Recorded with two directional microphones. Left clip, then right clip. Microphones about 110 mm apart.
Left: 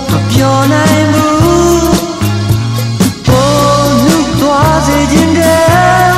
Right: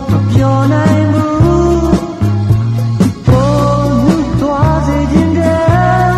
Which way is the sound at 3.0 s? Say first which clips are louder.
Left 3 dB; 25° left (ahead or behind).